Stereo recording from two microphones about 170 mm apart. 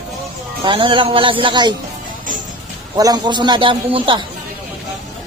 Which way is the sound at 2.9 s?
20° right (ahead or behind).